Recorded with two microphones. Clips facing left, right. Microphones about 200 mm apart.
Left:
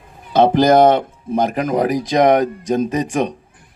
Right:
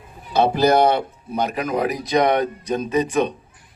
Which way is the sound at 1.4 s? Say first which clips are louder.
Left 4 dB; 45° left (ahead or behind).